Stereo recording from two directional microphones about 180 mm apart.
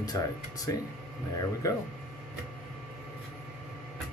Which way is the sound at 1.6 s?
20° left (ahead or behind).